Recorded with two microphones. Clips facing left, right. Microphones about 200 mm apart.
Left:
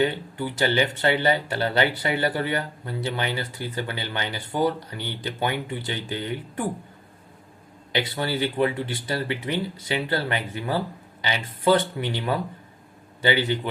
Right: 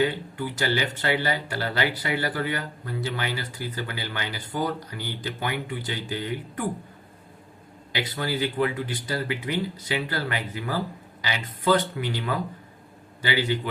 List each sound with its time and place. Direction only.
0.0 s speech: 25° left (ahead or behind)
7.9 s speech: 25° left (ahead or behind)